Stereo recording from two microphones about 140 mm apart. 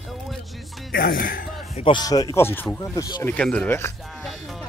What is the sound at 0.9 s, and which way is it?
Speech, 90° left.